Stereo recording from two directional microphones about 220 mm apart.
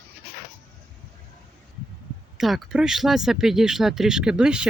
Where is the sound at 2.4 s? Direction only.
Centre (ahead or behind).